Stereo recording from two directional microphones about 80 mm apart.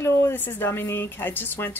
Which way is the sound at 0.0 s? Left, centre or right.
Left.